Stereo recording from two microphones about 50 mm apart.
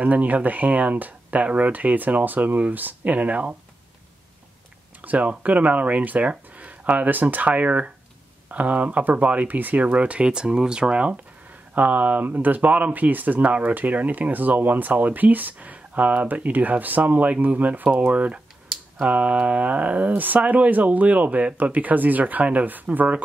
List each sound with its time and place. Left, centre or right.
0.0 s speech: right
5.0 s speech: right